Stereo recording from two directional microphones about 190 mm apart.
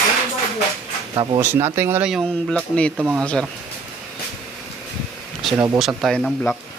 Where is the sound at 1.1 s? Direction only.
25° right (ahead or behind).